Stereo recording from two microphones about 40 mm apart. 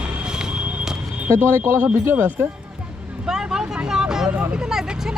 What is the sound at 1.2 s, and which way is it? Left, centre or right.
Speech, right.